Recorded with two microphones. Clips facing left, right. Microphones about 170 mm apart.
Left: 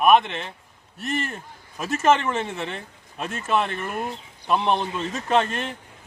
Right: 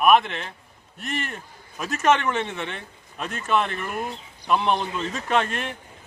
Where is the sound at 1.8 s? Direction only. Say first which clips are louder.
Left 1 dB; 25° left (ahead or behind).